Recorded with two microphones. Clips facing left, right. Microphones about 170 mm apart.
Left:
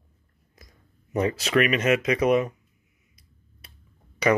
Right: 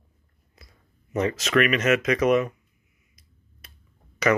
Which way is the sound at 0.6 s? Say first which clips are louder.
Left 1 dB; 40° left (ahead or behind).